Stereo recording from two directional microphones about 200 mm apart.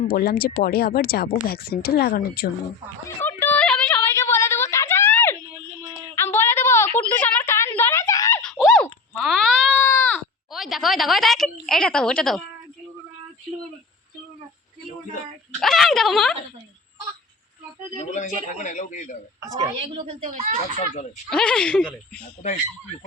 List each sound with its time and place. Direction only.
0.1 s speech: 50° left (ahead or behind)
3.2 s a sound: 10° left (ahead or behind)
8.4 s wail: centre (ahead or behind)
9.8 s a sound: 10° left (ahead or behind)
10.5 s a woman's voice: centre (ahead or behind)
15.6 s speech: centre (ahead or behind)
17.9 s a man's voice: 35° left (ahead or behind)
19.7 s a woman's voice: 30° right (ahead or behind)
20.2 s a child's voice: 40° right (ahead or behind)
21.2 s speech: 5° left (ahead or behind)